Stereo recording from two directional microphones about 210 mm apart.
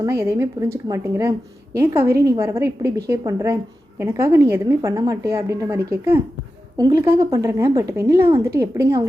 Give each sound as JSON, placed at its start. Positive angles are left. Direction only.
{"t": 0.0, "sound": "a woman's voice", "side_deg": -10}